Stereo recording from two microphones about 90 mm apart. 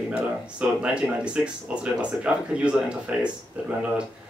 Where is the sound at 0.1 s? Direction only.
10° right (ahead or behind).